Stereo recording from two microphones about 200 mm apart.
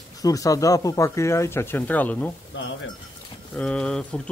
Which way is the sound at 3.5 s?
5° left (ahead or behind).